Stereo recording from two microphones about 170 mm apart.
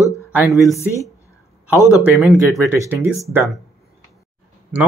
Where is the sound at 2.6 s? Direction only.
15° right (ahead or behind).